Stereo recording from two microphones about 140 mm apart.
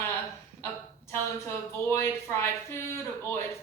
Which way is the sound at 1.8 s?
15° left (ahead or behind).